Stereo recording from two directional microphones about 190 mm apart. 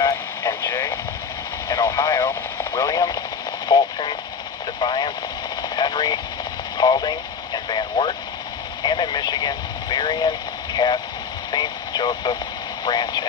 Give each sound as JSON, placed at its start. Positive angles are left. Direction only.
{"t": 0.0, "sound": "radio", "side_deg": 15}
{"t": 8.8, "sound": "vehicle", "side_deg": 25}
{"t": 11.5, "sound": "radio", "side_deg": 25}